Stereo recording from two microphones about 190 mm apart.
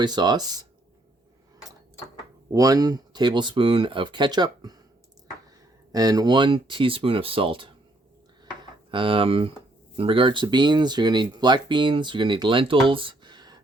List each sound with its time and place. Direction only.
0.0 s speech: 20° right (ahead or behind)
2.5 s speech: 20° right (ahead or behind)
5.9 s speech: 20° right (ahead or behind)
8.9 s speech: 25° right (ahead or behind)